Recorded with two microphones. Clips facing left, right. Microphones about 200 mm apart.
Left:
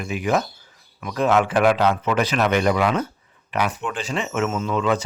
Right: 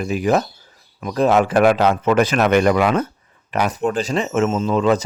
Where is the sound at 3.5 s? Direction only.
40° right (ahead or behind).